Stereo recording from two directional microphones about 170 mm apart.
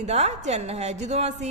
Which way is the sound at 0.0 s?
40° right (ahead or behind).